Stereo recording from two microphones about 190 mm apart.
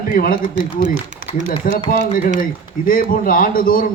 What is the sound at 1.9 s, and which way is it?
A man's voice, 45° left (ahead or behind).